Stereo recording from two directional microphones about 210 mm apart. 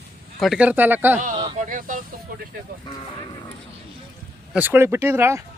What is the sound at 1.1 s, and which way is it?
Speech, 35° right (ahead or behind).